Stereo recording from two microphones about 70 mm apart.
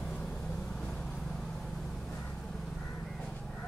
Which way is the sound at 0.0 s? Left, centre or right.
Centre.